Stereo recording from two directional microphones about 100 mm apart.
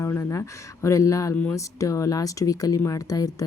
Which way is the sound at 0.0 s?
30° left (ahead or behind).